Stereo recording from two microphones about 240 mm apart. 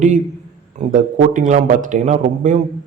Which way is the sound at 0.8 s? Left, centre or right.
Right.